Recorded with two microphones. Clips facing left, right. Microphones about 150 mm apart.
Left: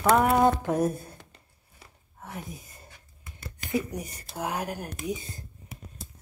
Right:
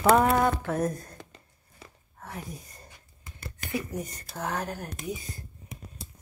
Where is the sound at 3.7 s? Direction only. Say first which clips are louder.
Left 3 dB; 15° left (ahead or behind).